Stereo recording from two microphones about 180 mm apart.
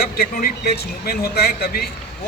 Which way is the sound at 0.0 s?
60° left (ahead or behind).